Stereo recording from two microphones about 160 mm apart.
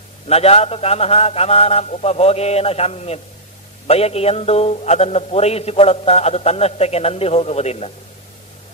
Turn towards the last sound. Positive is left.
turn(degrees=40)  # may be behind; listen again after turning